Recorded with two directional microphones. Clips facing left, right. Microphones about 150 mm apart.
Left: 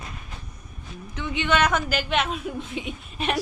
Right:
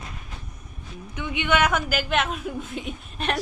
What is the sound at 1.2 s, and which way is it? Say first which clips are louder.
Speech: even; 10° right (ahead or behind).